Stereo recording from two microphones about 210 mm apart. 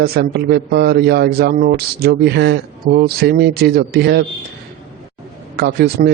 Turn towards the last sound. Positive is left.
turn(degrees=-50)  # may be behind; listen again after turning